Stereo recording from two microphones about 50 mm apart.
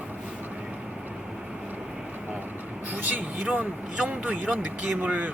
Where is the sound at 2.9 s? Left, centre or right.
Right.